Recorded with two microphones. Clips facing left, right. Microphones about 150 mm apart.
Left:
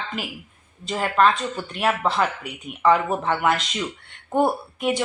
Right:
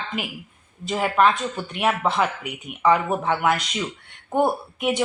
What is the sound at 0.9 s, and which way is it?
A woman's voice, 5° right (ahead or behind).